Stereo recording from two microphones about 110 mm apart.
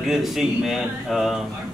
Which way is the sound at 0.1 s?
Centre (ahead or behind).